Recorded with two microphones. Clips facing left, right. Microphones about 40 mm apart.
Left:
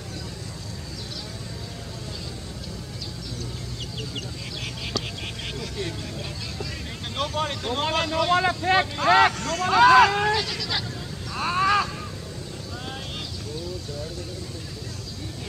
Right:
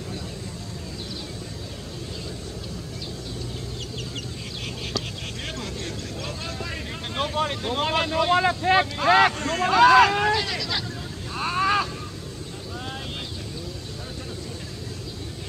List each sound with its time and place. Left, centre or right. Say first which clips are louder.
7.3 s speech: right 2 dB; centre
9.4 s speech: right 2 dB; right
9.7 s speech: even; centre
11.3 s a sound: left 1 dB; centre